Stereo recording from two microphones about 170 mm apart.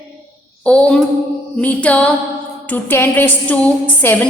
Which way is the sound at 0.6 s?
5° left (ahead or behind).